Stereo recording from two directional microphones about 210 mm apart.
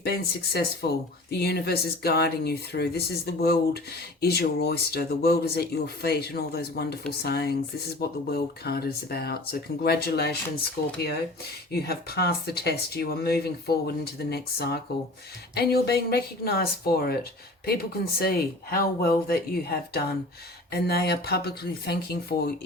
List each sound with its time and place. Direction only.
0.0 s speech: 50° left (ahead or behind)
11.7 s speech: 50° left (ahead or behind)